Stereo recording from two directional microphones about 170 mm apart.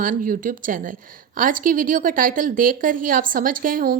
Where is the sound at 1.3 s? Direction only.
55° right (ahead or behind).